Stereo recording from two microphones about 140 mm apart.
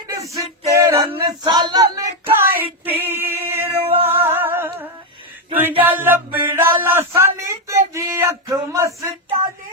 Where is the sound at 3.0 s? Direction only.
15° right (ahead or behind).